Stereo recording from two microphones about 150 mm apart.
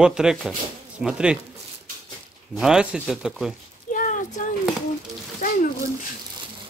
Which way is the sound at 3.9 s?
60° left (ahead or behind).